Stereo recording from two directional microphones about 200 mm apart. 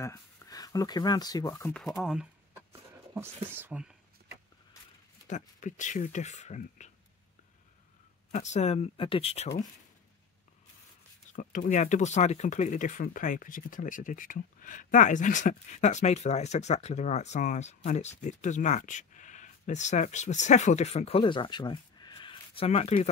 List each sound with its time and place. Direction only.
0.0 s speech: 15° left (ahead or behind)
1.7 s speech: centre (ahead or behind)
5.3 s speech: 40° left (ahead or behind)
8.3 s speech: 35° left (ahead or behind)
11.3 s speech: 40° left (ahead or behind)